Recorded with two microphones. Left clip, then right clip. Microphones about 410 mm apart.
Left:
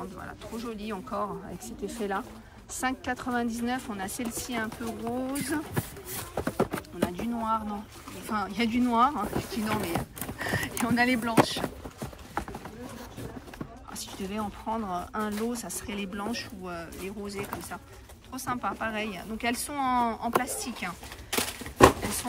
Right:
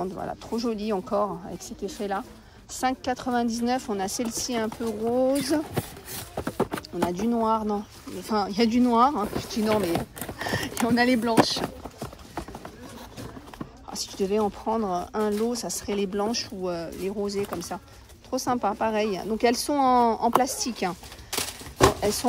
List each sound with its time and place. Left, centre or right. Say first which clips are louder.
0.0 s speech: right 8 dB; centre
13.9 s speech: right 10 dB; centre
21.3 s typewriter: left 1 dB; centre